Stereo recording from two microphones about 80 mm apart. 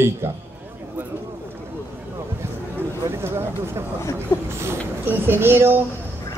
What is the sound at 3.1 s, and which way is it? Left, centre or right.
A woman's voice, right.